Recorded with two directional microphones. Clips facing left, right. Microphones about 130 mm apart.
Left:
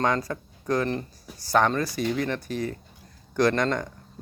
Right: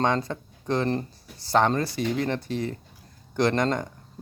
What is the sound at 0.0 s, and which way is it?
Speech, 25° right (ahead or behind).